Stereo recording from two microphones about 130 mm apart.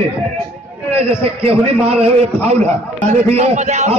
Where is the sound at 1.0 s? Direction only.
45° right (ahead or behind).